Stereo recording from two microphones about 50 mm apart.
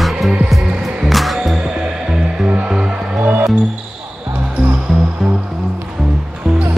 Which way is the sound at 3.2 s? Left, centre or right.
Right.